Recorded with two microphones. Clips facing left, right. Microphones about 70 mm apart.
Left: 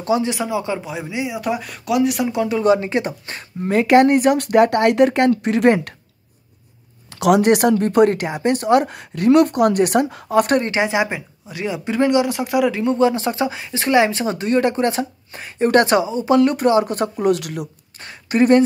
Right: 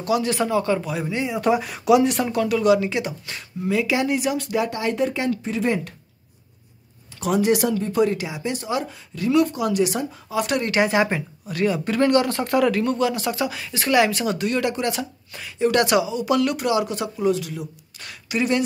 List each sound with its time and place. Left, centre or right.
0.0 s speech: left
0.3 s speech: centre
2.3 s speech: left
7.2 s a woman's voice: left
10.2 s speech: left
10.6 s speech: left
17.3 s a woman's voice: left
17.9 s speech: left